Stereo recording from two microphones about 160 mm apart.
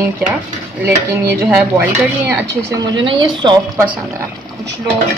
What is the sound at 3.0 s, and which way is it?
Speech, 30° right (ahead or behind).